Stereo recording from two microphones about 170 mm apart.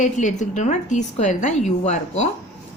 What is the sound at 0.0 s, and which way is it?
Speech, 45° left (ahead or behind).